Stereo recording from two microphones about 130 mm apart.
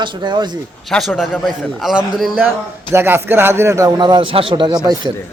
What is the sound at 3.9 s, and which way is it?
Speech, 35° right (ahead or behind).